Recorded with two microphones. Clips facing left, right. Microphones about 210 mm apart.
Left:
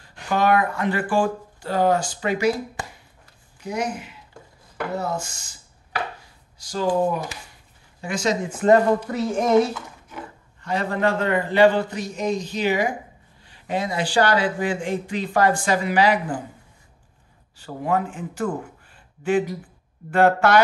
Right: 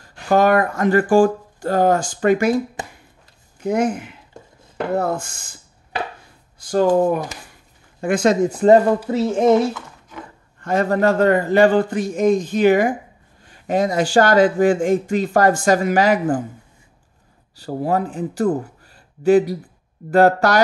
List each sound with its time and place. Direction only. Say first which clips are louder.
0.0 s speech: right 6 dB; 45° right (ahead or behind)
3.6 s speech: right 8 dB; 50° right (ahead or behind)
6.6 s speech: right 6 dB; 55° right (ahead or behind)
8.5 s speech: right 2 dB; 30° right (ahead or behind)
10.6 s speech: right 5 dB; 45° right (ahead or behind)
17.6 s a man's voice: right 3 dB; 35° right (ahead or behind)